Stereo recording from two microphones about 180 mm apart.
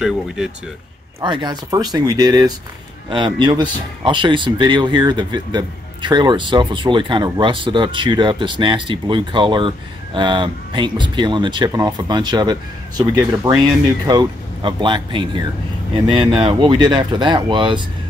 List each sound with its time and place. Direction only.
1.2 s speech: 25° right (ahead or behind)